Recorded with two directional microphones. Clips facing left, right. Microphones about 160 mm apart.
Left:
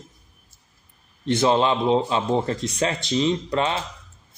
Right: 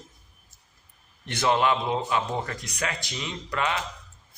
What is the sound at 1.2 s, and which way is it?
A man's voice, 20° left (ahead or behind).